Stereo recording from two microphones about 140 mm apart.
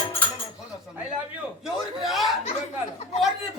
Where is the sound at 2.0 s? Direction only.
Centre (ahead or behind).